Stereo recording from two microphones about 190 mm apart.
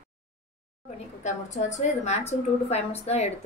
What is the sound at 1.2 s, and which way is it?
A woman's voice, 40° left (ahead or behind).